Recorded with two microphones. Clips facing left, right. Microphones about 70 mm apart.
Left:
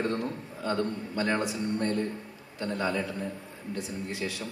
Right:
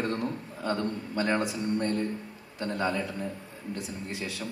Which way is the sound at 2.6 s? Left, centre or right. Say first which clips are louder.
Even; right.